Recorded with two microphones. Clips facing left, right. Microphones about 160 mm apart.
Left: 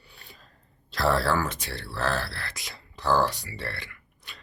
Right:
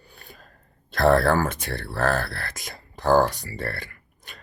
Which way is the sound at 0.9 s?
50° right (ahead or behind).